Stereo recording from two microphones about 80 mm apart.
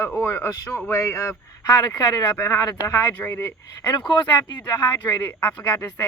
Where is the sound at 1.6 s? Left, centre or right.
Left.